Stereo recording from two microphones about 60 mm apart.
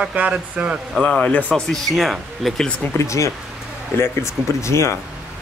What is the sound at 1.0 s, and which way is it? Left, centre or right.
Speech, centre.